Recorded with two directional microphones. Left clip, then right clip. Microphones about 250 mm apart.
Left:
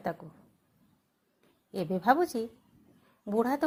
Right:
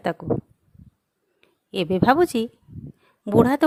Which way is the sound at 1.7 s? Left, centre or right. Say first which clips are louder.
Right 7 dB; right.